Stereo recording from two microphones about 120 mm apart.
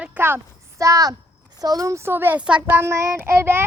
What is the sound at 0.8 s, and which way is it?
A child's voice, 30° right (ahead or behind).